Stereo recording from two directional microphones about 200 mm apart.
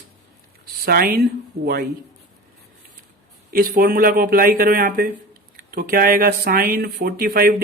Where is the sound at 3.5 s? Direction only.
45° right (ahead or behind).